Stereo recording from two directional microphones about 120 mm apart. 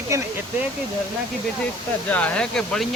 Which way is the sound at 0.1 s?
25° right (ahead or behind).